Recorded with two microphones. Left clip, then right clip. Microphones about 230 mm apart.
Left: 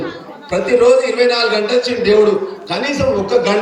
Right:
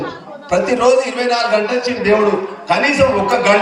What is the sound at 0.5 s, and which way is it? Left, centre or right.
A man's voice, right.